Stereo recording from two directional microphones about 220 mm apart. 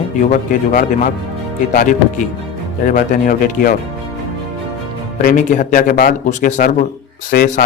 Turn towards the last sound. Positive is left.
turn(degrees=40)  # may be behind; listen again after turning